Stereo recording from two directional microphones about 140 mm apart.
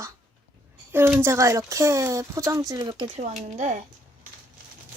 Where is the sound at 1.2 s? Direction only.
20° right (ahead or behind).